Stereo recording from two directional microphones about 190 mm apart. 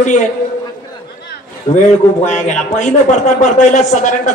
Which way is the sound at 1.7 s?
35° left (ahead or behind).